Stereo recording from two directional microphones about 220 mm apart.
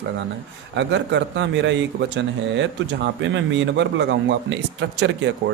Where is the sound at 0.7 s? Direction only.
55° right (ahead or behind).